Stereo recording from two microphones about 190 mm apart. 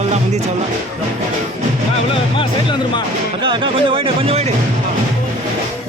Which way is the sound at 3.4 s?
25° right (ahead or behind).